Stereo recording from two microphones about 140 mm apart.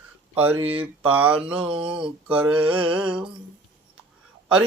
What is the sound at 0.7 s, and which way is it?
Speech, 10° right (ahead or behind).